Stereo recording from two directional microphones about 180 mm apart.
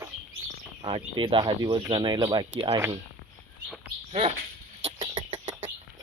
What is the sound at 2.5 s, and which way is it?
Speech, 35° right (ahead or behind).